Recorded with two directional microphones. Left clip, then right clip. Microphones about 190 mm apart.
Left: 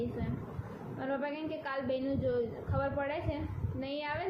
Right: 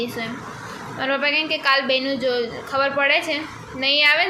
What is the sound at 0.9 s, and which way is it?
A woman's voice, 5° right (ahead or behind).